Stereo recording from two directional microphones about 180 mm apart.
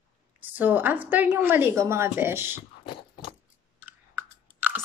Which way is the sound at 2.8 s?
30° left (ahead or behind).